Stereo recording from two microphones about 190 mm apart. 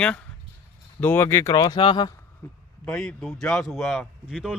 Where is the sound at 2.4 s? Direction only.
10° left (ahead or behind).